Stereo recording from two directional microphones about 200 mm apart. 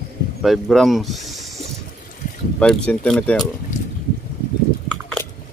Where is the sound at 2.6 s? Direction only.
5° left (ahead or behind).